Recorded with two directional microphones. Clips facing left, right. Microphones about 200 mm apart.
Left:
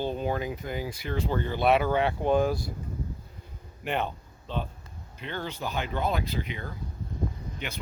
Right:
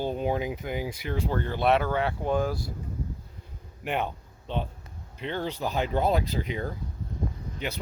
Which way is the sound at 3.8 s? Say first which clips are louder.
Even; 10° right (ahead or behind).